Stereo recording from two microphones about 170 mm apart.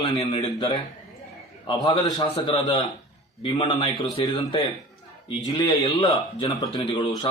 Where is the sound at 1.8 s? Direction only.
25° left (ahead or behind).